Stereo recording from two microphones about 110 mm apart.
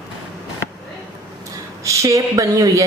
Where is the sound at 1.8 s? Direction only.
30° right (ahead or behind).